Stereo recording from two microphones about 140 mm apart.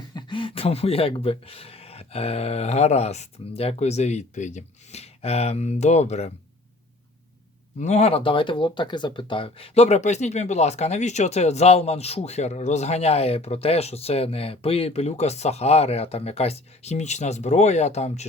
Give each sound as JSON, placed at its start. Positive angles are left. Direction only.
{"t": 0.1, "sound": "speech", "side_deg": 35}
{"t": 7.8, "sound": "speech", "side_deg": 55}